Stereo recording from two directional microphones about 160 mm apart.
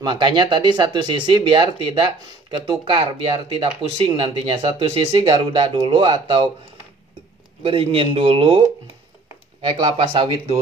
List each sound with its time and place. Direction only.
0.0 s speech: 30° right (ahead or behind)
7.6 s speech: 35° right (ahead or behind)